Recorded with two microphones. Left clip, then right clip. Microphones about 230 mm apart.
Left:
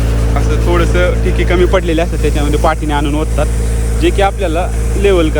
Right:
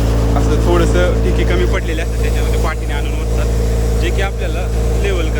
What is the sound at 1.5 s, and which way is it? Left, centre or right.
Speech, centre.